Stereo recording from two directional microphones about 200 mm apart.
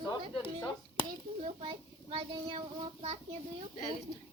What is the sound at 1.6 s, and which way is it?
Child singing, 25° right (ahead or behind).